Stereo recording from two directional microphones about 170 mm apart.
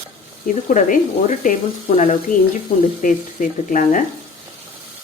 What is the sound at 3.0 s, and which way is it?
Speech, 50° left (ahead or behind).